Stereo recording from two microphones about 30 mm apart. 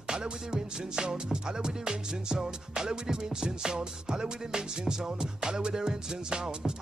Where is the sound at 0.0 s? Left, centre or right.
Right.